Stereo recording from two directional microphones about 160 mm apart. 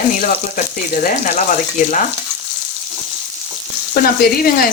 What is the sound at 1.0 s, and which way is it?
Speech, 45° left (ahead or behind).